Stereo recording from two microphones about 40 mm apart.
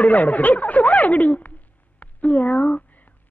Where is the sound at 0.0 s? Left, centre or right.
Left.